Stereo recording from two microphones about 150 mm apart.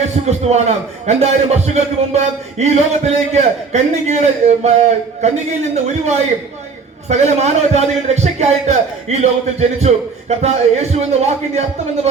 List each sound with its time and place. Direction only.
0.0 s a man's voice: 45° right (ahead or behind)